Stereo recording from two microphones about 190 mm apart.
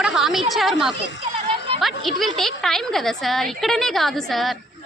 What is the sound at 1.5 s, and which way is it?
Music, 30° right (ahead or behind).